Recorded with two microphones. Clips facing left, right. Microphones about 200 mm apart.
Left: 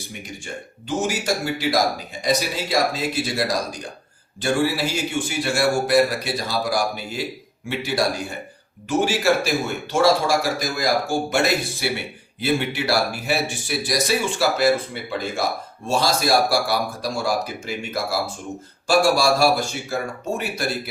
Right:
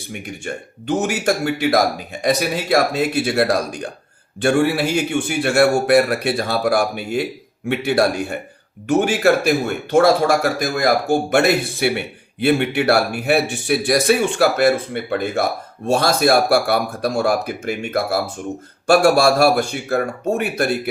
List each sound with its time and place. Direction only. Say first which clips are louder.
0.1 s a man's voice: right 7 dB; 60° right (ahead or behind)